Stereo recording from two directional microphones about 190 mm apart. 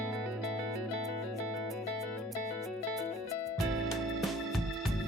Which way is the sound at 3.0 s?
15° left (ahead or behind).